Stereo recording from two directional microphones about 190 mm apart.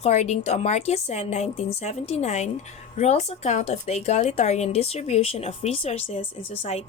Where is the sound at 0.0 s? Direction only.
35° left (ahead or behind).